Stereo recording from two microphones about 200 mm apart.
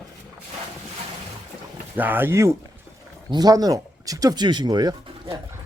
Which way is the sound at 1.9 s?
10° right (ahead or behind).